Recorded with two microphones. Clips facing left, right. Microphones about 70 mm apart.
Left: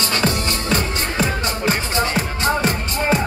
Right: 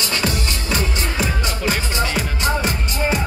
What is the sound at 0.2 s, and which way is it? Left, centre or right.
Music, left.